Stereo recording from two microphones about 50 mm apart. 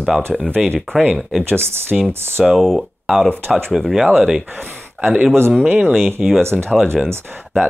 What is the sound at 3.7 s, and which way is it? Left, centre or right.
Speech, centre.